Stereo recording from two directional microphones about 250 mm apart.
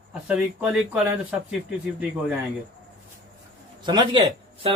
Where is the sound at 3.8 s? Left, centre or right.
Centre.